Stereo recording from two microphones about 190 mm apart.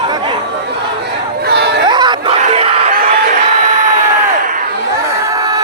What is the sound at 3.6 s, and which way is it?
Crowd, 45° right (ahead or behind).